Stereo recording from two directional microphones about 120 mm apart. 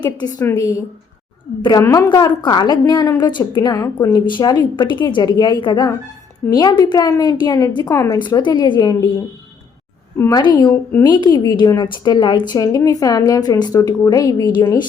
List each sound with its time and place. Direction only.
0.0 s a woman's voice: 35° left (ahead or behind)
0.3 s a woman's voice: 25° left (ahead or behind)
1.8 s a woman's voice: 30° left (ahead or behind)
7.9 s a woman's voice: 25° left (ahead or behind)
8.2 s a woman's voice: 40° left (ahead or behind)
10.2 s a woman's voice: 35° left (ahead or behind)